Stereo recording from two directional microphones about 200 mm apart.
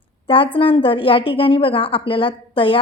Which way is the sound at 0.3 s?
25° left (ahead or behind).